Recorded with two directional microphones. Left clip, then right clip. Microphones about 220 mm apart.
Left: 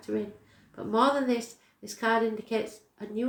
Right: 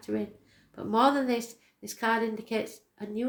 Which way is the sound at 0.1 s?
40° right (ahead or behind).